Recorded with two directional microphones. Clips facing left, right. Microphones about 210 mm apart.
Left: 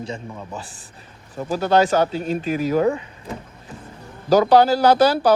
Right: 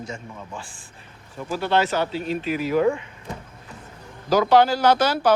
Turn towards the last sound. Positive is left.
turn(degrees=35)  # may be behind; listen again after turning